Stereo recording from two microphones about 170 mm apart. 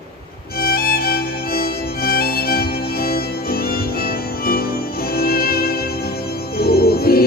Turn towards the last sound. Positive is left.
turn(degrees=65)  # may be behind; listen again after turning